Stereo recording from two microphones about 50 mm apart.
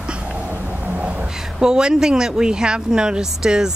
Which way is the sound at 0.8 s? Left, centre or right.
Right.